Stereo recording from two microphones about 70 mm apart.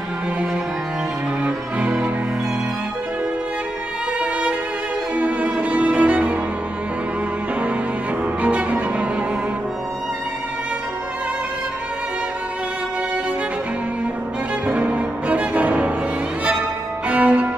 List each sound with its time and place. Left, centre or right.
1.4 s music: centre
4.2 s music: centre
8.4 s cello: centre
14.7 s music: centre
17.1 s music: centre